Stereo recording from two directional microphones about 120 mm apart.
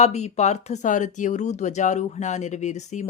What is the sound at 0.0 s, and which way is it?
Speech, 65° left (ahead or behind).